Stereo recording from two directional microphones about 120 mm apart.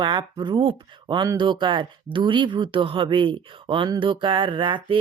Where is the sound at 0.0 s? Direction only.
40° right (ahead or behind).